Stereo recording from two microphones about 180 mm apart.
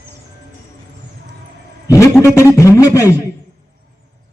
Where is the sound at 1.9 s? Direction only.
15° left (ahead or behind).